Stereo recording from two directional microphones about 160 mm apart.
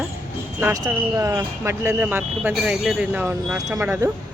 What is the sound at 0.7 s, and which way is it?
Speech, 20° right (ahead or behind).